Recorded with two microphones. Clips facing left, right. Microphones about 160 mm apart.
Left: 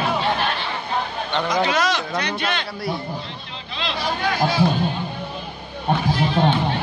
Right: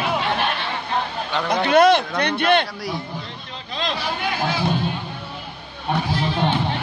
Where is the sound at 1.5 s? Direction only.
55° right (ahead or behind).